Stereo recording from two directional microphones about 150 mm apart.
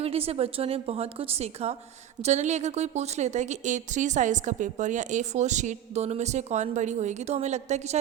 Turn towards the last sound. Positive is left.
turn(degrees=-50)  # may be behind; listen again after turning